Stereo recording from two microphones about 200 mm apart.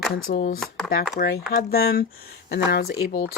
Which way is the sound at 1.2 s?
50° left (ahead or behind).